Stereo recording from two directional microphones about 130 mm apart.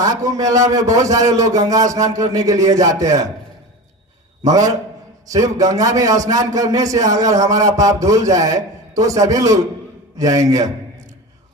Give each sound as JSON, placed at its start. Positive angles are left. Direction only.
{"t": 0.0, "sound": "a man's voice", "side_deg": -25}
{"t": 4.4, "sound": "a man's voice", "side_deg": -30}